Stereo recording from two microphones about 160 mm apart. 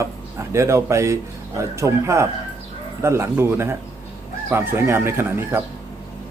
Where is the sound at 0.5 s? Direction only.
15° right (ahead or behind).